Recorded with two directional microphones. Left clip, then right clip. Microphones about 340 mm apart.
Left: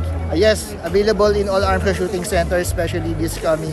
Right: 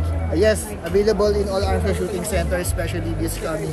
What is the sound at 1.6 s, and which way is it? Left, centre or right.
Speech, centre.